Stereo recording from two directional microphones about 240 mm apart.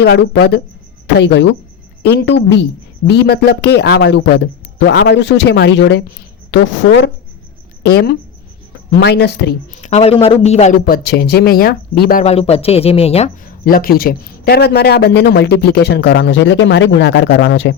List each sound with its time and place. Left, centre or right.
0.0 s a man's voice: left
9.8 s a man's voice: left